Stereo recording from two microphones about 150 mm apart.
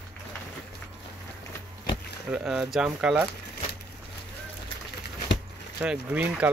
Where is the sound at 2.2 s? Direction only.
5° right (ahead or behind).